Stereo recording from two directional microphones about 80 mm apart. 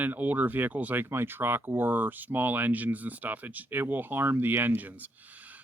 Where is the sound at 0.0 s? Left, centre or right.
Right.